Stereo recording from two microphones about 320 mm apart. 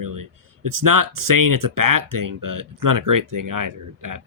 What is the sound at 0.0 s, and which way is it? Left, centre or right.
Speech, right.